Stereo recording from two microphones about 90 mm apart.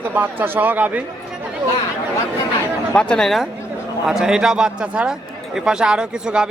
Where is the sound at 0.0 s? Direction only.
25° right (ahead or behind).